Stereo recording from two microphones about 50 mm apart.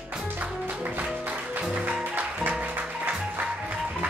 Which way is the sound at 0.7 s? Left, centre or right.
Right.